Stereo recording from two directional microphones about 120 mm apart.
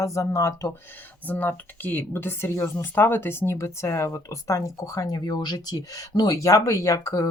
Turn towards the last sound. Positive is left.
turn(degrees=25)  # may be behind; listen again after turning